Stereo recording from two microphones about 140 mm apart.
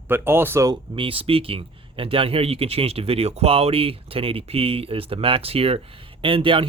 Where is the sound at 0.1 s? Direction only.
15° right (ahead or behind).